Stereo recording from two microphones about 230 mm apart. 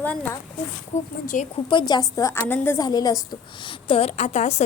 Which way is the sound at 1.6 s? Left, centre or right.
Centre.